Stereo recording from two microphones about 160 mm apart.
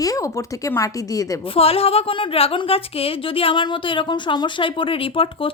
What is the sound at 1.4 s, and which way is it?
A woman's voice, 35° left (ahead or behind).